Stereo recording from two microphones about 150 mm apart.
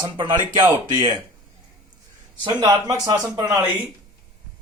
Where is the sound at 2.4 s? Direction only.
25° right (ahead or behind).